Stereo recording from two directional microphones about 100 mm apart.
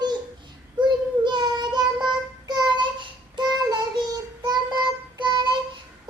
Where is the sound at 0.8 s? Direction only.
50° right (ahead or behind).